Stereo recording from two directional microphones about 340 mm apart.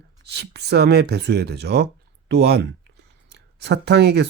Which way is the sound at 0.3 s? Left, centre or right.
Right.